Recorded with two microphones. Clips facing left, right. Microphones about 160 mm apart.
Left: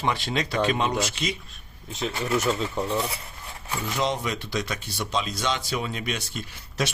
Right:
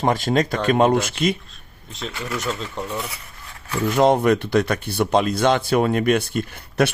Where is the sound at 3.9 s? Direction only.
55° right (ahead or behind).